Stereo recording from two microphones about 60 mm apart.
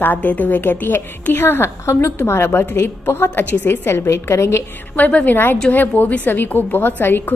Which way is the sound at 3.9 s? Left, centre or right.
Left.